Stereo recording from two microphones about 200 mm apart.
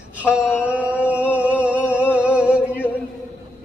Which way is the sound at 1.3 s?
5° right (ahead or behind).